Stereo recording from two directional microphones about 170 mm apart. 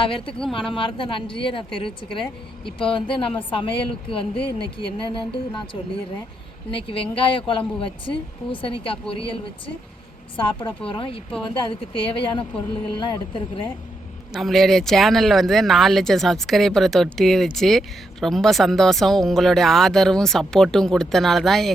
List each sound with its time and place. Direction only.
0.0 s speech: 30° left (ahead or behind)
6.7 s speech: 30° left (ahead or behind)
10.3 s speech: 30° left (ahead or behind)
14.3 s speech: centre (ahead or behind)